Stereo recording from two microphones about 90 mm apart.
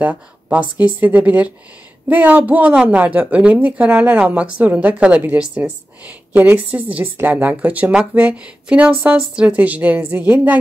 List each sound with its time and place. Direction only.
0.0 s a woman's voice: 15° right (ahead or behind)